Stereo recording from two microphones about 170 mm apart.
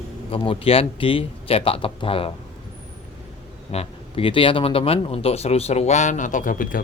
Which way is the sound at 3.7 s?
35° left (ahead or behind).